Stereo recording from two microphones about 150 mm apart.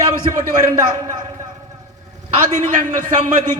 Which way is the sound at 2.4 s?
55° right (ahead or behind).